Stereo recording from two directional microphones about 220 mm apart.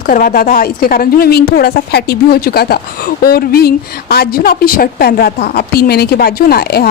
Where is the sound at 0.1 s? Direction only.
40° left (ahead or behind).